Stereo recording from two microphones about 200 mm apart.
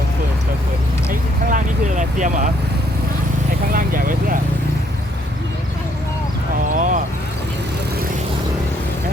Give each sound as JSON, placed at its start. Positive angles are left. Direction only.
{"t": 1.5, "sound": "vehicle", "side_deg": -40}
{"t": 3.7, "sound": "speech", "side_deg": -45}
{"t": 6.7, "sound": "vehicle", "side_deg": -40}